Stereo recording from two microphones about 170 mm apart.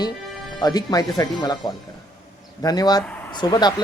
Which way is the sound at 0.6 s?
25° left (ahead or behind).